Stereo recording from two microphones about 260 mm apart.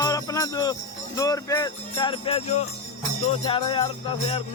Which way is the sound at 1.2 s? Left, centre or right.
Centre.